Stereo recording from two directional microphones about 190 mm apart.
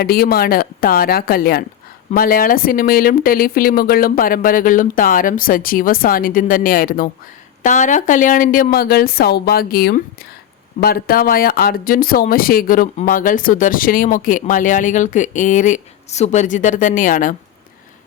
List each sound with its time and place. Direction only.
0.0 s speech: 55° left (ahead or behind)